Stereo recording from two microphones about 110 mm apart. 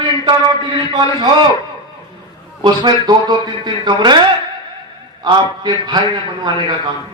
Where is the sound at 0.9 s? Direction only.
40° right (ahead or behind).